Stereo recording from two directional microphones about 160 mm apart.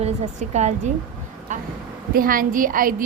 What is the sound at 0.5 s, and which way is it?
Speech, 45° right (ahead or behind).